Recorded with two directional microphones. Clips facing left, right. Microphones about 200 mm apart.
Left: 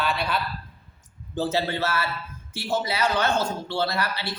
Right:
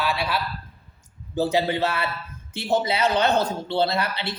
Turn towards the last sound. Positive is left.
turn(degrees=-20)  # may be behind; listen again after turning